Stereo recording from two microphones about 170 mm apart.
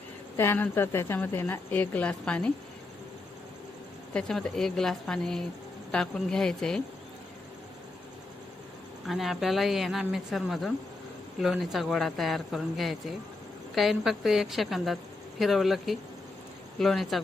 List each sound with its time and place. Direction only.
0.3 s a woman's voice: 10° left (ahead or behind)
4.1 s speech: 5° left (ahead or behind)
9.0 s speech: centre (ahead or behind)